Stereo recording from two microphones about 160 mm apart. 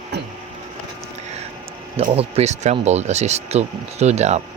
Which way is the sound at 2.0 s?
40° right (ahead or behind).